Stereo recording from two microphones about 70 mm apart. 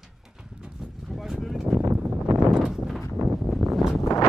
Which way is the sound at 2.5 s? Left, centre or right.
Centre.